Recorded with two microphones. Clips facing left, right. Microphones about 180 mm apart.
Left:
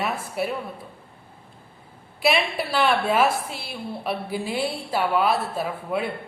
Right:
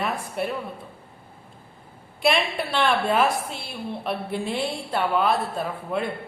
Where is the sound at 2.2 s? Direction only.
5° left (ahead or behind).